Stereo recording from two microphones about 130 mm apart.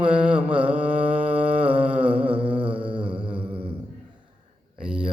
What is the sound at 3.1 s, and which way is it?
Mantra, 10° right (ahead or behind).